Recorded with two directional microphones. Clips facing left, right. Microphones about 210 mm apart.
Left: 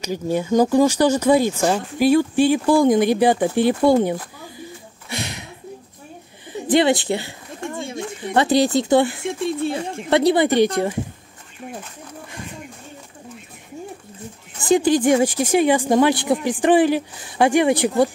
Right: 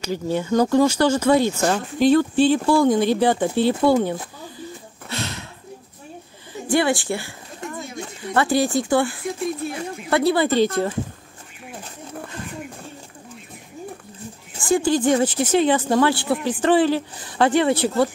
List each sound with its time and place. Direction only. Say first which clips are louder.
0.0 s speech: left 1 dB; 15° left (ahead or behind)
5.1 s a sound: even; 15° left (ahead or behind)
6.7 s speech: left 3 dB; 20° left (ahead or behind)
14.6 s speech: left 3 dB; 15° left (ahead or behind)